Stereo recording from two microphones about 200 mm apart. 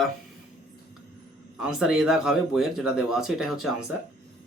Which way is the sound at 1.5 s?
5° right (ahead or behind).